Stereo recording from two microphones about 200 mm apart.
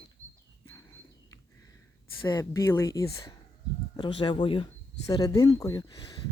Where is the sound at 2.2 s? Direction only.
20° left (ahead or behind).